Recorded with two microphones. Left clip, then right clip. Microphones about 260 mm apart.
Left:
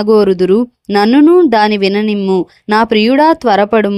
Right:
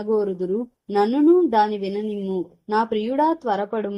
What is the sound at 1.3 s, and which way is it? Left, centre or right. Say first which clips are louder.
Speech: left 9 dB; left.